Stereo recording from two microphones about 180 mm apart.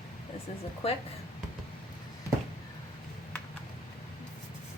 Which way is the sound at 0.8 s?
35° left (ahead or behind).